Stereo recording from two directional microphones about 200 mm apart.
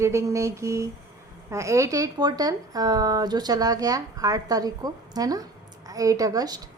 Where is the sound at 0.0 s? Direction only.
15° right (ahead or behind).